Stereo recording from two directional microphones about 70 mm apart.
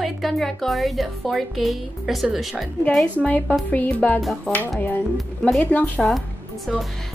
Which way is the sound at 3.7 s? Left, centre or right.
Left.